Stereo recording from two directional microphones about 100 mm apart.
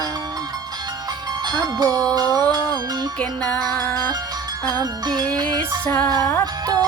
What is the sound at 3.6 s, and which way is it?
Music, 40° right (ahead or behind).